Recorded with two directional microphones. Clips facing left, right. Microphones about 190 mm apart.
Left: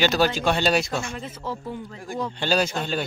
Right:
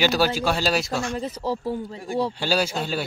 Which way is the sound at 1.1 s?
40° right (ahead or behind).